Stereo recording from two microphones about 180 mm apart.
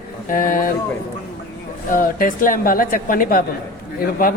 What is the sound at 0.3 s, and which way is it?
Speech, 50° left (ahead or behind).